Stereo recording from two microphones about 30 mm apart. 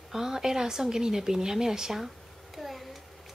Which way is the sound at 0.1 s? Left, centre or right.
Centre.